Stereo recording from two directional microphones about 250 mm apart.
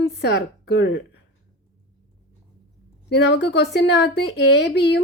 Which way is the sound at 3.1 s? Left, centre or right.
Left.